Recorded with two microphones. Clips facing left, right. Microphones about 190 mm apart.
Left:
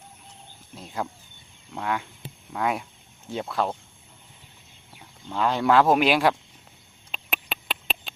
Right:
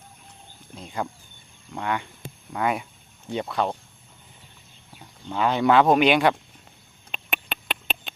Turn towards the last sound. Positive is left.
turn(degrees=0)  # may be behind; listen again after turning